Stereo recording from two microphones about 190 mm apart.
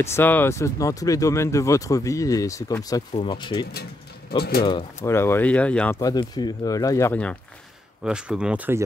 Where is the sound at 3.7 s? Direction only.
55° left (ahead or behind).